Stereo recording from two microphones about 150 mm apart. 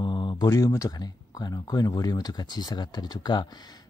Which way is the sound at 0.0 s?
30° left (ahead or behind).